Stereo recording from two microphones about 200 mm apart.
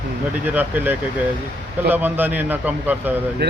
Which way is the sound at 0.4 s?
10° right (ahead or behind).